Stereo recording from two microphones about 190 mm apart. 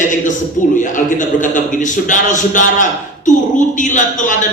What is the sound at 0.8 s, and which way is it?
A man's voice, 40° left (ahead or behind).